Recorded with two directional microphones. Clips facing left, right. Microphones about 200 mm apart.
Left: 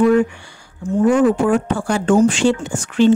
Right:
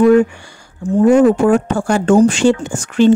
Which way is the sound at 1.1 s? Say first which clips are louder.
Right 5 dB; 45° right (ahead or behind).